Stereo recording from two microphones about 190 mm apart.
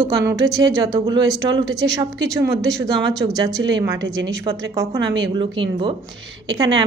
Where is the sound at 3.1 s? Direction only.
20° right (ahead or behind).